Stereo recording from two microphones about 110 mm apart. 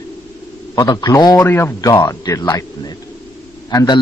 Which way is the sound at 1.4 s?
20° left (ahead or behind).